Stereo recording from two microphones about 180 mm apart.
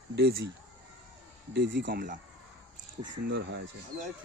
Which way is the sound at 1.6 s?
85° right.